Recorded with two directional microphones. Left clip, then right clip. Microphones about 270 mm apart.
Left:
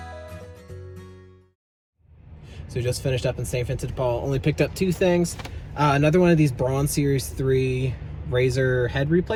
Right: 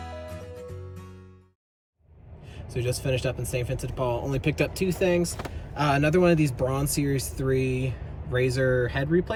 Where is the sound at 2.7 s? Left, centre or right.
Centre.